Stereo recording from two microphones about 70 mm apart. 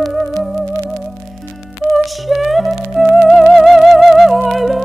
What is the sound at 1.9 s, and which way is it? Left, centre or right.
Music, centre.